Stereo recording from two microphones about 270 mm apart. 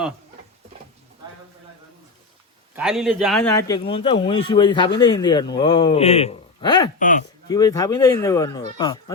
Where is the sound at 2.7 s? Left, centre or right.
Centre.